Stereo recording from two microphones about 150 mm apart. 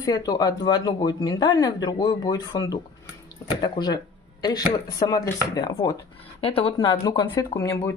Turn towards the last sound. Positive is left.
turn(degrees=20)  # may be behind; listen again after turning